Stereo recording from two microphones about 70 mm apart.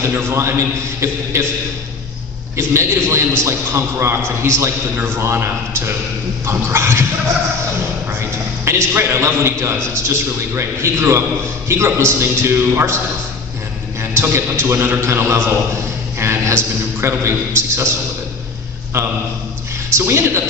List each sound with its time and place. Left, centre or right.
0.0 s a man's voice: right
2.6 s a man's voice: right
8.6 s a man's voice: right
14.0 s a man's voice: right
18.9 s a man's voice: right